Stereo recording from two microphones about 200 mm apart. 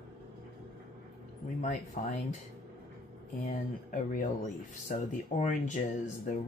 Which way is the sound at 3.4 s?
45° left (ahead or behind).